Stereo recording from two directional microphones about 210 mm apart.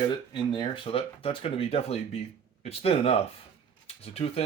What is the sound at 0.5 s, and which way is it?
Speech, 25° left (ahead or behind).